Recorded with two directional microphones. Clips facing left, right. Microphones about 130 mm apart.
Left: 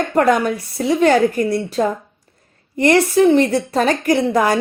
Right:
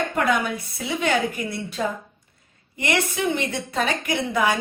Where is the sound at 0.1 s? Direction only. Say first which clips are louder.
Left 7 dB; 40° left (ahead or behind).